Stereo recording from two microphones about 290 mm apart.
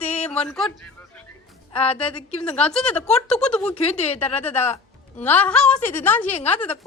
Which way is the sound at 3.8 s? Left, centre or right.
Left.